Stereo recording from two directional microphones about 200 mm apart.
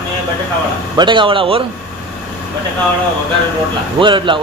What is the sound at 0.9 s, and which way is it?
Speech, 25° right (ahead or behind).